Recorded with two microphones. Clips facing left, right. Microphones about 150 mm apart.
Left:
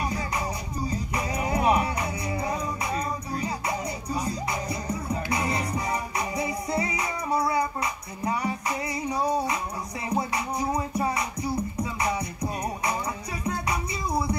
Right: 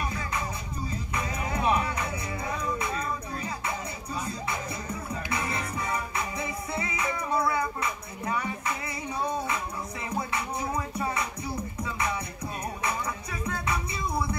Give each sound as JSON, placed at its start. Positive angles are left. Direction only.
{"t": 0.0, "sound": "music", "side_deg": 35}